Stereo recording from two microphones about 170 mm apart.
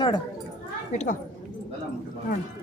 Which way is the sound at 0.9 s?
45° left (ahead or behind).